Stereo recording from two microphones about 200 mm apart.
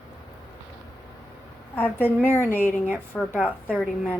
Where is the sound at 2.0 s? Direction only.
10° left (ahead or behind).